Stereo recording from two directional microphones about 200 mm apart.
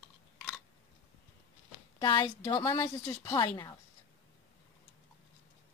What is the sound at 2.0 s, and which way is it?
A woman's voice, 20° left (ahead or behind).